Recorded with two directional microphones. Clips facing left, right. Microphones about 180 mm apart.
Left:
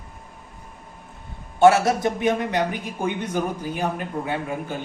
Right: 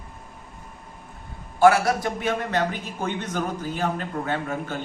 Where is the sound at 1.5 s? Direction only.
25° left (ahead or behind).